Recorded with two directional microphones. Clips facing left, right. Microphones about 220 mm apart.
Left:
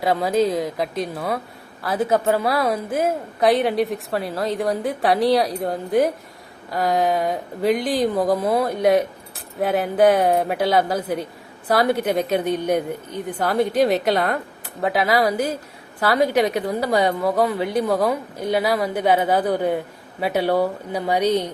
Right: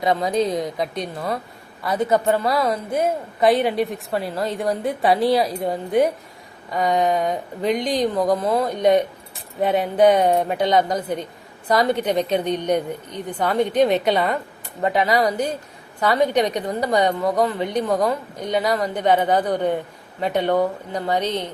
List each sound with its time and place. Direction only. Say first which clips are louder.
0.0 s a woman's voice: left 1 dB; 5° left (ahead or behind)